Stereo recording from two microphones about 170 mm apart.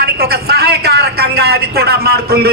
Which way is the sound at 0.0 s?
65° right (ahead or behind).